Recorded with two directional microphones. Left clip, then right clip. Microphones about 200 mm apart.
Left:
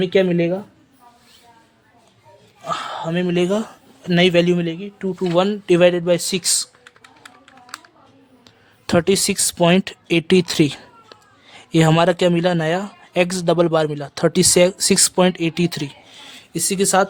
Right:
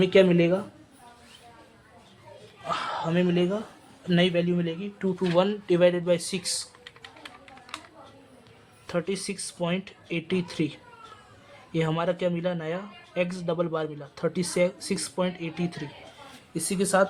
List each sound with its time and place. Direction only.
0.0 s speech: 20° left (ahead or behind)
2.6 s speech: 30° left (ahead or behind)
3.3 s a man's voice: 50° left (ahead or behind)
8.9 s a man's voice: 55° left (ahead or behind)